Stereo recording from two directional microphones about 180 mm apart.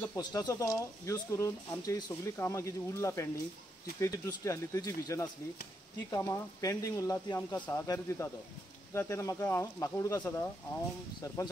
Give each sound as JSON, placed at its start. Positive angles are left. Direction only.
{"t": 0.0, "sound": "speech", "side_deg": 20}